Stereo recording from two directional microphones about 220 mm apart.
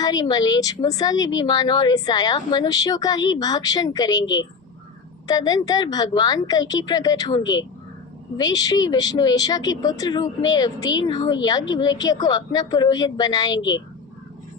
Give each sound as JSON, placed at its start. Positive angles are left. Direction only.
{"t": 0.0, "sound": "speech", "side_deg": 15}